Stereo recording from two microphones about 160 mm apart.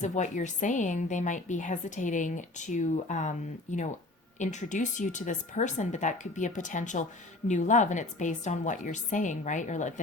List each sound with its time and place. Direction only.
0.0 s a woman's voice: 50° left (ahead or behind)